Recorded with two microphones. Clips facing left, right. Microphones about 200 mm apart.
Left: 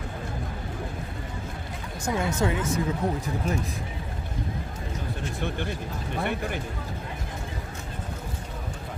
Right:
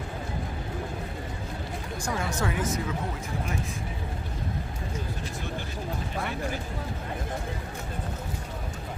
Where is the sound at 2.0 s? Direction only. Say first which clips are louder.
Left 5 dB; 25° left (ahead or behind).